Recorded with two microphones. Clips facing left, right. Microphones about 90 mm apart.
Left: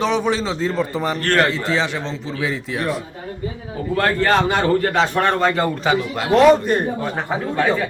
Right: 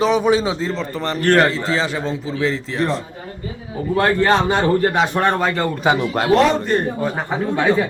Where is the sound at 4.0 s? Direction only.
20° right (ahead or behind).